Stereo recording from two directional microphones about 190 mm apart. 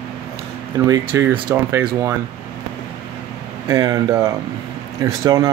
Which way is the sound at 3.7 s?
20° right (ahead or behind).